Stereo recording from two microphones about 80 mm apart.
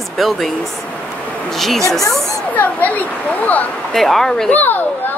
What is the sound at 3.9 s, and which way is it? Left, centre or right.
Speech, centre.